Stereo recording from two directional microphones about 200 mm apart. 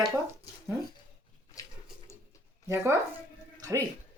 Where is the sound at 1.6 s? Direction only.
15° left (ahead or behind).